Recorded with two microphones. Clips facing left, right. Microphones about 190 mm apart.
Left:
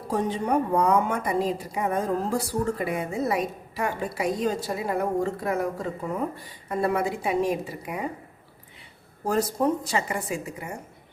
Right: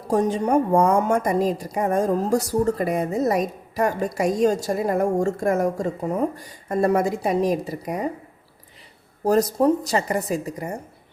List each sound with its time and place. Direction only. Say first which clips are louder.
0.1 s a woman's voice: right 5 dB; 45° right (ahead or behind)
9.2 s a woman's voice: right 6 dB; 40° right (ahead or behind)